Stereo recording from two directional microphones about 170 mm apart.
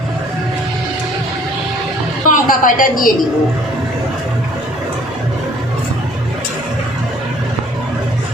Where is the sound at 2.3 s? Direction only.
50° left (ahead or behind).